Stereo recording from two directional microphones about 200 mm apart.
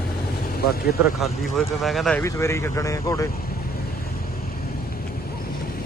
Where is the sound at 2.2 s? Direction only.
15° left (ahead or behind).